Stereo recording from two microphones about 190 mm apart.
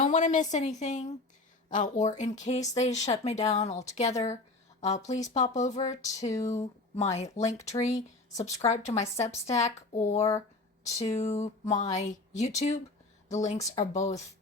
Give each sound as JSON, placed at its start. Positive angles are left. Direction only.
{"t": 0.0, "sound": "a woman's voice", "side_deg": 40}